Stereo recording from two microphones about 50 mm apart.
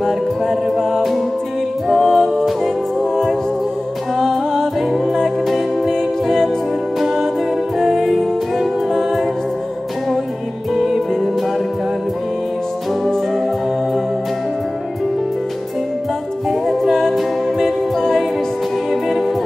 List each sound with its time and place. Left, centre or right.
0.0 s music: centre
10.7 s music: centre
16.4 s music: centre